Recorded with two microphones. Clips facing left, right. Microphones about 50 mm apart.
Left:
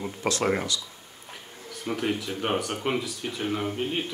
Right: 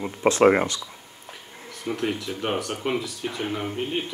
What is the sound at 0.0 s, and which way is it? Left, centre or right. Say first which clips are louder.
Speech: right 9 dB; right.